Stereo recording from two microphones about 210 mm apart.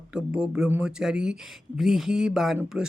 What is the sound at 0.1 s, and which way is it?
Speech, 5° right (ahead or behind).